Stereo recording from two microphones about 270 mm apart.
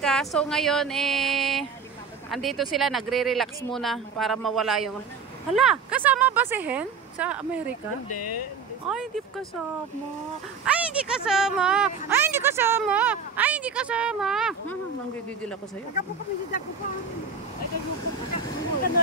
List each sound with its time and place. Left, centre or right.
0.0 s speech: centre
8.1 s speech: left
8.8 s speech: centre
10.6 s speech: centre